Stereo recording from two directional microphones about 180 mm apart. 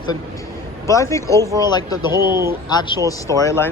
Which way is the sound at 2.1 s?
15° right (ahead or behind).